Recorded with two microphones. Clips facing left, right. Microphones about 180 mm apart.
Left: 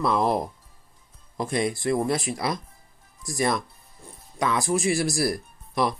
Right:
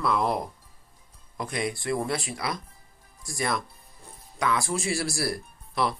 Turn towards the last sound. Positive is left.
turn(degrees=20)  # may be behind; listen again after turning